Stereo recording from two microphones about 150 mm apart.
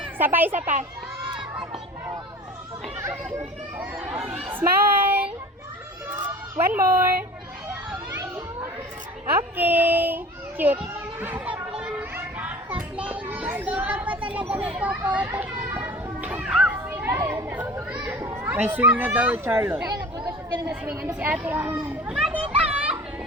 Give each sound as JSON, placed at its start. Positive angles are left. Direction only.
{"t": 0.2, "sound": "a child's voice", "side_deg": -10}
{"t": 3.0, "sound": "speech", "side_deg": -20}
{"t": 4.4, "sound": "child singing", "side_deg": -15}
{"t": 6.2, "sound": "speech", "side_deg": -15}
{"t": 8.1, "sound": "children playing", "side_deg": -20}
{"t": 9.3, "sound": "a child's voice", "side_deg": -10}
{"t": 11.8, "sound": "children playing", "side_deg": -10}
{"t": 14.8, "sound": "a child's voice", "side_deg": -10}
{"t": 22.0, "sound": "children playing", "side_deg": -10}